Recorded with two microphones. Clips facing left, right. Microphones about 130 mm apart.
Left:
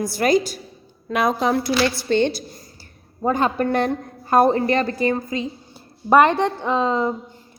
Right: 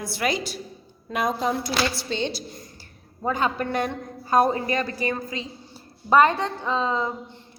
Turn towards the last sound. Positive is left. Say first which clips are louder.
# left 5 dB
turn(degrees=60)  # may be behind; listen again after turning